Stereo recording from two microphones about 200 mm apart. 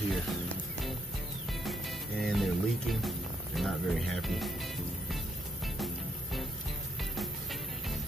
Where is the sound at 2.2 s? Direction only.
Centre (ahead or behind).